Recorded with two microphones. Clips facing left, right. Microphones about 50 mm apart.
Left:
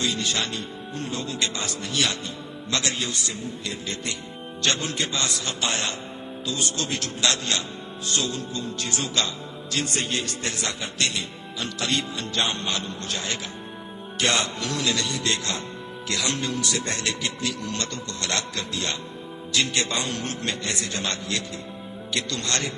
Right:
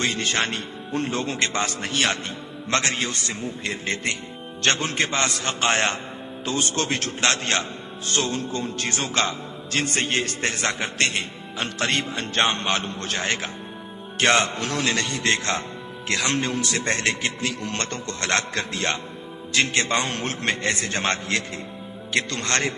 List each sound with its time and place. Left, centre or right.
0.0 s speech: right